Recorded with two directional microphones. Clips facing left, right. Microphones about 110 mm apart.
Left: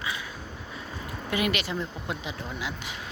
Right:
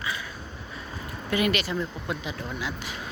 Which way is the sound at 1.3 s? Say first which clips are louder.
Right 3 dB; 15° left (ahead or behind).